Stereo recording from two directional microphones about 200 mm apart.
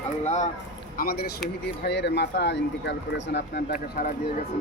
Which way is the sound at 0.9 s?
50° left (ahead or behind).